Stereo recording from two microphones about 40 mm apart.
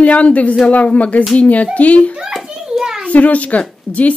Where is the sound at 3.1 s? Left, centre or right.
Left.